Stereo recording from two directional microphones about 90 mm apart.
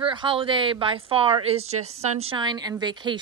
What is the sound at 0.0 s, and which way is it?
Speech, 70° right (ahead or behind).